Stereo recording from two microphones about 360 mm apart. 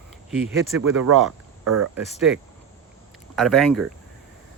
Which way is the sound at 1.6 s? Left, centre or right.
Right.